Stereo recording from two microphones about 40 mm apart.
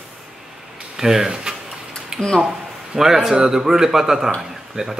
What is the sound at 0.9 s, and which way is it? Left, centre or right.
Speech, centre.